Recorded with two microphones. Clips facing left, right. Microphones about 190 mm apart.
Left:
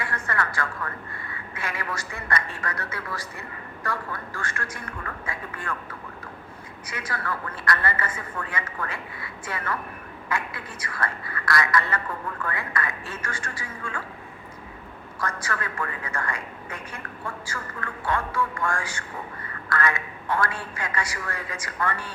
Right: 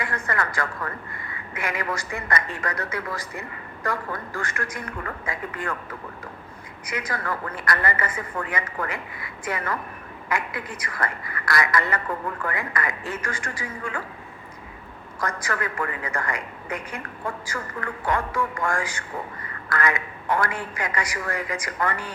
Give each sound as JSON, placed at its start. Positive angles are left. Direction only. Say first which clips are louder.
{"t": 0.0, "sound": "a sound", "louder": "right 2 dB", "side_deg": -15}
{"t": 1.5, "sound": "a woman's voice", "louder": "right 4 dB", "side_deg": -15}
{"t": 4.4, "sound": "a woman's voice", "louder": "right 4 dB", "side_deg": -15}
{"t": 6.8, "sound": "a woman's voice", "louder": "right 3 dB", "side_deg": -15}
{"t": 15.2, "sound": "a woman's voice", "louder": "right 3 dB", "side_deg": -15}